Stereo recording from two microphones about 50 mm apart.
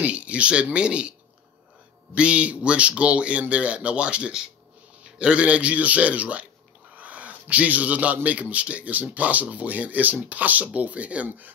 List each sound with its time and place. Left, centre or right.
0.0 s a man's voice: right
2.1 s a man's voice: right